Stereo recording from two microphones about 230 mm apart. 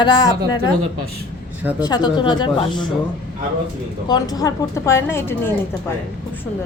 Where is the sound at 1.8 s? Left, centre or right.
Centre.